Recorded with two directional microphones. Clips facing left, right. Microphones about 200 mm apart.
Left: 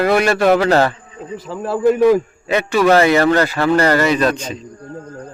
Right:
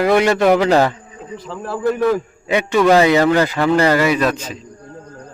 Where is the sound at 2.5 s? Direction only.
15° right (ahead or behind).